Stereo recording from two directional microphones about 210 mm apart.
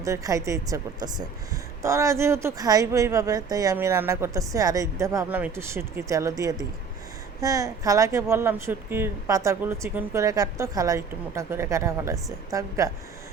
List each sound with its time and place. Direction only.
0.0 s speech: 15° right (ahead or behind)